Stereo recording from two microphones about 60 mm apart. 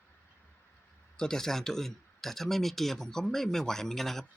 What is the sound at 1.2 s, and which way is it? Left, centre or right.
Speech, centre.